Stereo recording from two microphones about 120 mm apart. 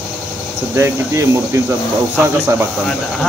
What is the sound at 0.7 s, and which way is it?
Speech, 25° right (ahead or behind).